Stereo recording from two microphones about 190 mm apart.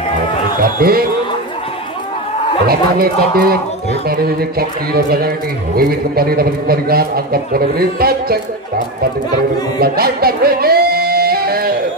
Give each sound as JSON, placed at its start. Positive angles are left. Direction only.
{"t": 0.6, "sound": "a man's voice", "side_deg": -50}
{"t": 2.6, "sound": "a man's voice", "side_deg": -55}
{"t": 9.8, "sound": "music", "side_deg": -55}